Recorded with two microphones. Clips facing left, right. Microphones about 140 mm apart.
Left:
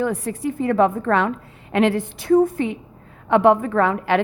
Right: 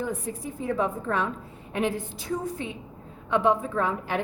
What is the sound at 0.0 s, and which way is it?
A woman's voice, 80° left.